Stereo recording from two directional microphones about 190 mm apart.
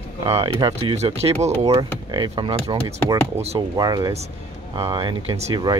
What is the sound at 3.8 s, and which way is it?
Speech, 20° right (ahead or behind).